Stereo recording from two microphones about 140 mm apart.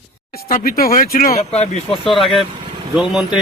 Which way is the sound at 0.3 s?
90° left.